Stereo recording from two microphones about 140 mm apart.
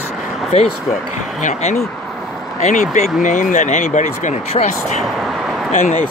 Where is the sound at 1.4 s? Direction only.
65° left (ahead or behind).